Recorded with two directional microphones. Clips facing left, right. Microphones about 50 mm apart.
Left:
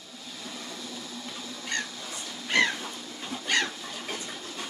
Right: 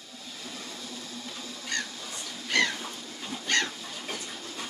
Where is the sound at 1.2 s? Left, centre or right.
Left.